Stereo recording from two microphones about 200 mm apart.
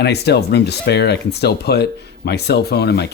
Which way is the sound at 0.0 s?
55° left (ahead or behind).